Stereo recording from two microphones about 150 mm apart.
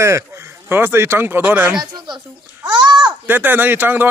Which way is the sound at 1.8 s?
30° right (ahead or behind).